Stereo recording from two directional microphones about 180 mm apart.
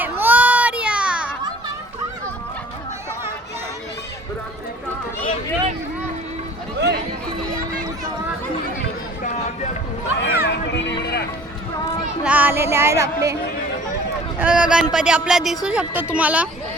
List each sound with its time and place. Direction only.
0.0 s baby cry: 10° right (ahead or behind)
6.7 s chatter: 70° right (ahead or behind)
10.2 s music: 80° left
12.2 s music: 10° right (ahead or behind)
14.3 s speech: 5° right (ahead or behind)